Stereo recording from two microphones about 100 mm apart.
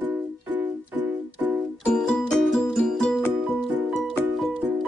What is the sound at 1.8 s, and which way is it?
Music, 5° left (ahead or behind).